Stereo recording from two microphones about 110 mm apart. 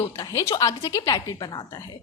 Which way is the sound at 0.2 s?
30° left (ahead or behind).